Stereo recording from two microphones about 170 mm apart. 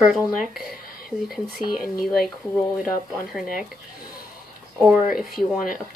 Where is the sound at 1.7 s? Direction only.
60° left (ahead or behind).